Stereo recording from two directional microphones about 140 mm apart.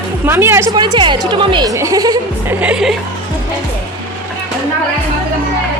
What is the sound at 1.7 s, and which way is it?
Speech, 25° right (ahead or behind).